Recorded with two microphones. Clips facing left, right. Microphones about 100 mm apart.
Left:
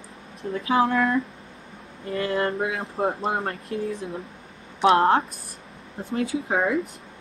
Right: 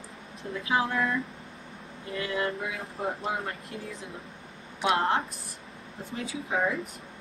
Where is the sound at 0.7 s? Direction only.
35° left (ahead or behind).